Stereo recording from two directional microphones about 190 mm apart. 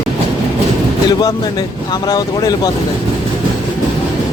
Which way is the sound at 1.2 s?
20° left (ahead or behind).